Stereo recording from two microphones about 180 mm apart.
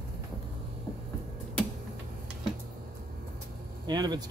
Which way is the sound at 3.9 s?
25° right (ahead or behind).